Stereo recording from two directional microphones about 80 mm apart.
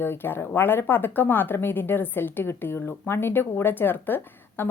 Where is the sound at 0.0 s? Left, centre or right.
Left.